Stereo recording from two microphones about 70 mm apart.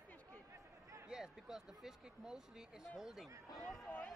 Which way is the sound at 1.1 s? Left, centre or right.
Centre.